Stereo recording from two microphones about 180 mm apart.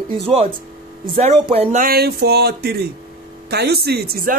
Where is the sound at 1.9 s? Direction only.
60° right (ahead or behind).